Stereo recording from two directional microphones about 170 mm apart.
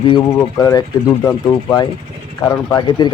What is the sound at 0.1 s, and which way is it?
Speech, 25° left (ahead or behind).